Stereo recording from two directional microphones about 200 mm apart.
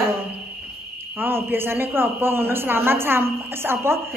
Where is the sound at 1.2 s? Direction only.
10° right (ahead or behind).